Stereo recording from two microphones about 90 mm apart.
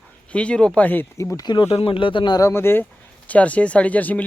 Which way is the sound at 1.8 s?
70° left (ahead or behind).